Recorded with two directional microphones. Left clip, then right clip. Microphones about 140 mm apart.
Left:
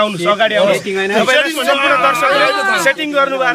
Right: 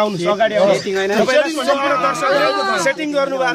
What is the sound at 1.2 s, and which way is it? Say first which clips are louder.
A man's voice: left 2 dB; 15° left (ahead or behind).